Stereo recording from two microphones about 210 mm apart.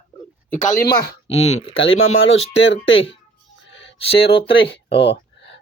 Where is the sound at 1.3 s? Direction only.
80° left.